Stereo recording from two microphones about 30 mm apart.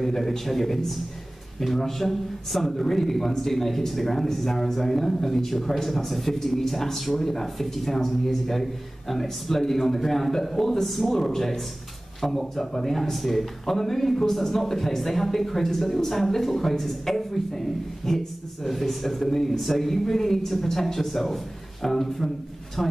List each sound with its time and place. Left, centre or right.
0.0 s a man's voice: centre